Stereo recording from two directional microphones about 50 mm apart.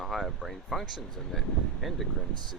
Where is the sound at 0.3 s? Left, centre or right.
Centre.